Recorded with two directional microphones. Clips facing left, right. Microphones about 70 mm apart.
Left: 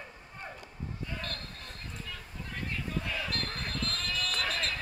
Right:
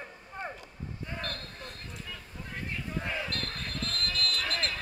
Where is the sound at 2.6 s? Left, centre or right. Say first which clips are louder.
Even; right.